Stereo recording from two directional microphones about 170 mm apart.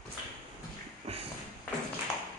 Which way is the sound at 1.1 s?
35° right (ahead or behind).